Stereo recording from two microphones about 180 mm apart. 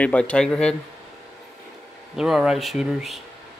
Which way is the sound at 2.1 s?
5° right (ahead or behind).